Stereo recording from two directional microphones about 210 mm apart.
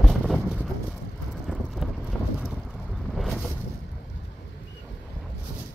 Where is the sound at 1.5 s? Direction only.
Centre (ahead or behind).